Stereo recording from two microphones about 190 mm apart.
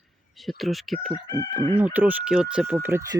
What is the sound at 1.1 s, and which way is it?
Chicken, 20° left (ahead or behind).